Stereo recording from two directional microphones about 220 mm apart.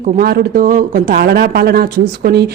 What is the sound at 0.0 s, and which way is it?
A woman's voice, 45° right (ahead or behind).